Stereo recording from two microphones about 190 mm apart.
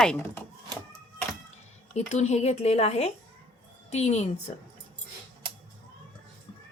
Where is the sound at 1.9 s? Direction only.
35° left (ahead or behind).